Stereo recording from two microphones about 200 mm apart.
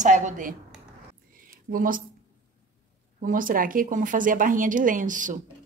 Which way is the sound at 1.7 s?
45° right (ahead or behind).